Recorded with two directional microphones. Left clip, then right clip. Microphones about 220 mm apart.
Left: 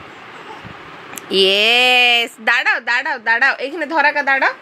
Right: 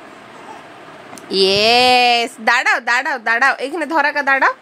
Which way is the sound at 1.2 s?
15° right (ahead or behind).